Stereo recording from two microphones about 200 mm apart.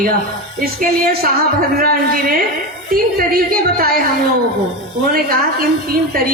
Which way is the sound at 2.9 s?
50° right (ahead or behind).